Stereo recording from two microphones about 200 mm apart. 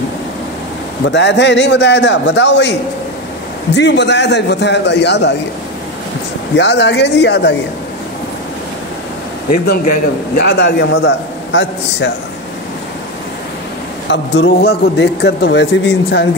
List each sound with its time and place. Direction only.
1.0 s a man's voice: 60° left (ahead or behind)
3.7 s a man's voice: 60° left (ahead or behind)
6.5 s a man's voice: 60° left (ahead or behind)
9.7 s a man's voice: 50° left (ahead or behind)
14.0 s a man's voice: 60° left (ahead or behind)